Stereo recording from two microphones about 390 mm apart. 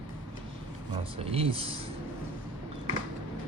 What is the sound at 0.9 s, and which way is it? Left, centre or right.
Speech, centre.